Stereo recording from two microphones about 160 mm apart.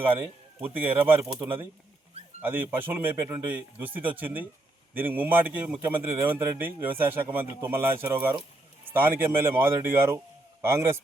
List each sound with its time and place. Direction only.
0.6 s speech: 10° right (ahead or behind)